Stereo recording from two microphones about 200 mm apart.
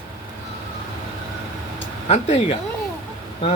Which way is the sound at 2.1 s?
35° left (ahead or behind).